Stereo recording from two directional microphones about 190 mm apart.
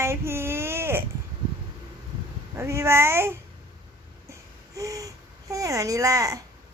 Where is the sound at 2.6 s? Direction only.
15° right (ahead or behind).